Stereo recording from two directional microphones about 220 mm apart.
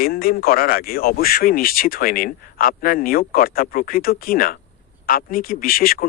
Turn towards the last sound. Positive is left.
turn(degrees=40)  # may be behind; listen again after turning